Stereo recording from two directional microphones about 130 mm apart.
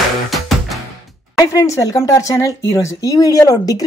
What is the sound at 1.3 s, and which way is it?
Speech, 25° left (ahead or behind).